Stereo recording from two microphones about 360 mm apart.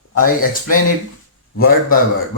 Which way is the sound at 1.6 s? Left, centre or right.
Left.